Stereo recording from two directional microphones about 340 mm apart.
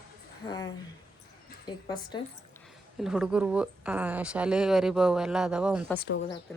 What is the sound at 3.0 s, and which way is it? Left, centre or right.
Speech, centre.